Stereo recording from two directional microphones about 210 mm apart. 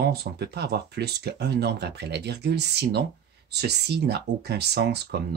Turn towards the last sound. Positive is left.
turn(degrees=-50)  # may be behind; listen again after turning